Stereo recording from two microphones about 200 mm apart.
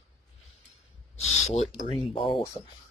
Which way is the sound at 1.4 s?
30° left (ahead or behind).